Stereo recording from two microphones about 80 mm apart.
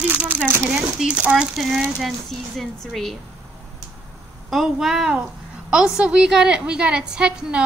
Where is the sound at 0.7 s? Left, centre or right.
Centre.